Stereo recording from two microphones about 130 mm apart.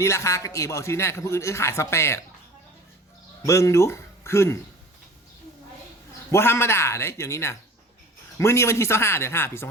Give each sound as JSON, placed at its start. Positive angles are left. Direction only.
{"t": 0.0, "sound": "speech", "side_deg": 20}
{"t": 3.4, "sound": "speech", "side_deg": 20}
{"t": 6.3, "sound": "speech", "side_deg": 20}